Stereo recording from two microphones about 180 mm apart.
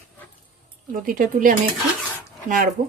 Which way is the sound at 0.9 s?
50° right (ahead or behind).